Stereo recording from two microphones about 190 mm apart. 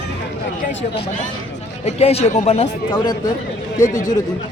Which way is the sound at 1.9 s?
35° left (ahead or behind).